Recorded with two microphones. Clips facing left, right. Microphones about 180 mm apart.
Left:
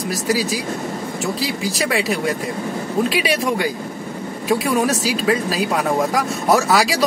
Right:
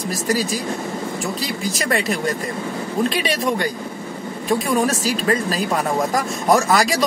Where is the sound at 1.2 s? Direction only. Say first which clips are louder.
Left 6 dB; centre (ahead or behind).